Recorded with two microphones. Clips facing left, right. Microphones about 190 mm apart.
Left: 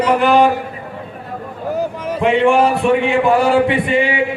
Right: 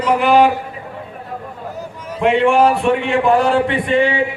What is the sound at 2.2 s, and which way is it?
A man's voice, centre (ahead or behind).